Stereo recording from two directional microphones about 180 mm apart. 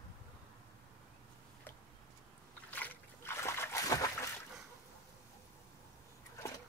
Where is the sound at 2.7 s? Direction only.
10° left (ahead or behind).